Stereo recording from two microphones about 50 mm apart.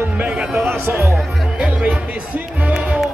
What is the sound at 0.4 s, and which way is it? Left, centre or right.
Speech, centre.